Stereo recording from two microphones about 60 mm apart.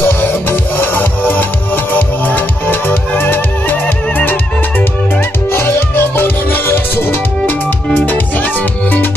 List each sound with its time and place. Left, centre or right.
0.0 s music: left
5.5 s music: left
7.9 s music: left